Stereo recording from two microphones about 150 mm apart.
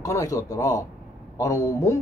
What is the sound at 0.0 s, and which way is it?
A man's voice, 20° left (ahead or behind).